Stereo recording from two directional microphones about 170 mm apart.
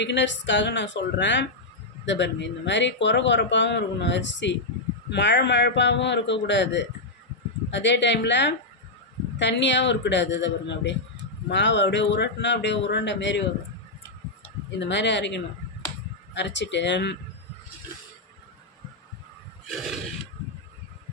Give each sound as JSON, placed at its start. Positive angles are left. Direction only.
{"t": 0.0, "sound": "speech", "side_deg": 90}
{"t": 14.9, "sound": "speech", "side_deg": 90}
{"t": 19.7, "sound": "neigh", "side_deg": 0}